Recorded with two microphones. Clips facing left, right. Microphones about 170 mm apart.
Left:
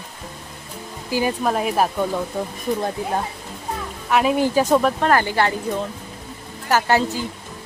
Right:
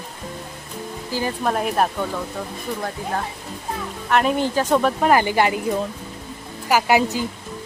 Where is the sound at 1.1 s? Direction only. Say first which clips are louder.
Left 4 dB; 15° left (ahead or behind).